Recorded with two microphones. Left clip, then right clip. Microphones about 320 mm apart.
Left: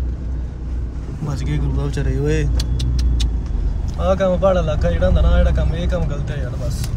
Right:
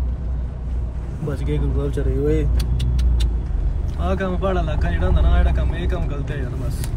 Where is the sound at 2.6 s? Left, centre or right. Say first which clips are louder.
Left 3 dB; centre.